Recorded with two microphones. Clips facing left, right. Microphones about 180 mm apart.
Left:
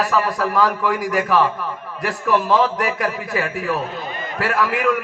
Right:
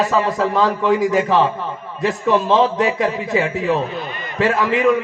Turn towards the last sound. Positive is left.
turn(degrees=-20)  # may be behind; listen again after turning